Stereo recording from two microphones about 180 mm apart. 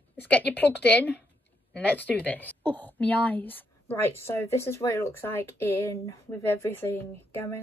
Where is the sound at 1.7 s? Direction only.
10° left (ahead or behind).